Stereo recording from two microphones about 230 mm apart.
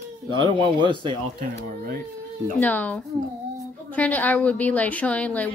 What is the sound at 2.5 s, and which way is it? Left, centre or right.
A woman's voice, centre.